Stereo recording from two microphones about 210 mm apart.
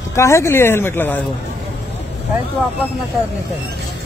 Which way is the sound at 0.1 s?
15° left (ahead or behind).